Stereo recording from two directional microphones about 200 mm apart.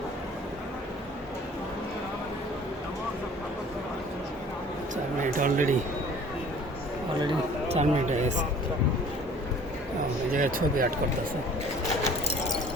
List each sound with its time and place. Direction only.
5.2 s speech: 40° right (ahead or behind)
7.2 s speech: 30° right (ahead or behind)
10.3 s speech: 45° right (ahead or behind)